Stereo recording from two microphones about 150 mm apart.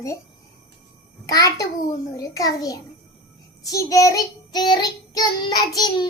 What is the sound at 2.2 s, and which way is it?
Child singing, 25° left (ahead or behind).